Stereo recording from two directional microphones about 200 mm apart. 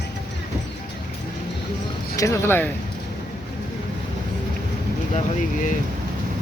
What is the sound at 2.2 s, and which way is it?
Speech, 15° left (ahead or behind).